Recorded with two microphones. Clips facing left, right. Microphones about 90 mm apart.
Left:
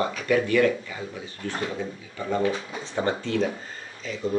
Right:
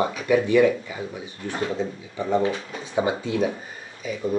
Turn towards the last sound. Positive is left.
turn(degrees=-10)  # may be behind; listen again after turning